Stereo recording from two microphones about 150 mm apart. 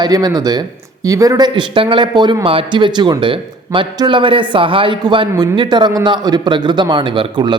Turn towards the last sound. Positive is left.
turn(degrees=-30)  # may be behind; listen again after turning